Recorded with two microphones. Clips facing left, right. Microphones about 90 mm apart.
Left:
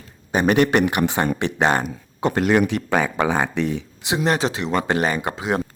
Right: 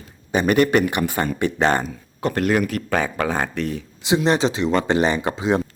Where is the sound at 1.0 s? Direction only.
25° left (ahead or behind).